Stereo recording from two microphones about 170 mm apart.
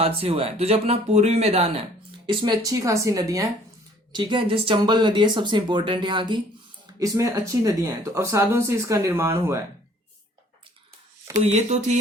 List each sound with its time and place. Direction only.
0.0 s speech: 35° right (ahead or behind); by 9.6 s 15° right (ahead or behind)
11.4 s speech: 45° right (ahead or behind)